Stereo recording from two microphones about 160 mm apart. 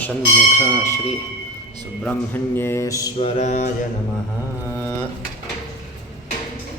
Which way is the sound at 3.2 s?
35° left (ahead or behind).